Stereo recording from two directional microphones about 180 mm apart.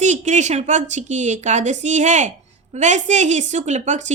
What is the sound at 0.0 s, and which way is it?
Speech, 40° right (ahead or behind).